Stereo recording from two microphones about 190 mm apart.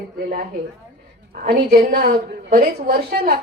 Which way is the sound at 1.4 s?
50° right (ahead or behind).